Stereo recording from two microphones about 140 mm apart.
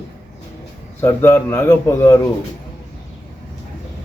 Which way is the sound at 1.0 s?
15° left (ahead or behind).